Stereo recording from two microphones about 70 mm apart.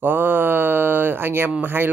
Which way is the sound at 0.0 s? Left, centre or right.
Right.